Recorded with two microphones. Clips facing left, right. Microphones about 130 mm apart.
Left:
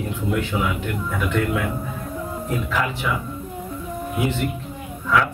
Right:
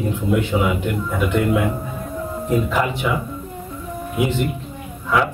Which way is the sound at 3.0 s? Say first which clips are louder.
Right 3 dB; 20° right (ahead or behind).